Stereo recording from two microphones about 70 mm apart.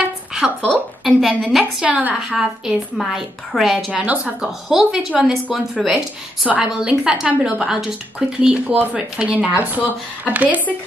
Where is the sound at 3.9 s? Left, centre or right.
Centre.